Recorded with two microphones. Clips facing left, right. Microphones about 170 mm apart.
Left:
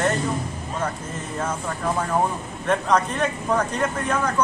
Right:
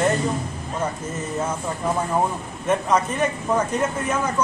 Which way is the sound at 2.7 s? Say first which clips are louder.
Even; 5° right (ahead or behind).